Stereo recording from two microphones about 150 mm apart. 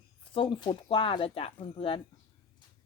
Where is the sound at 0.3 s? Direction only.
35° left (ahead or behind).